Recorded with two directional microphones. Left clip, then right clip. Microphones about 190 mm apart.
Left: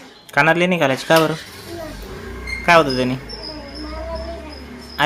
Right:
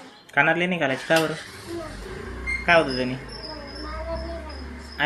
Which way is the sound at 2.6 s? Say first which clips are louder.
Left 6 dB; 30° left (ahead or behind).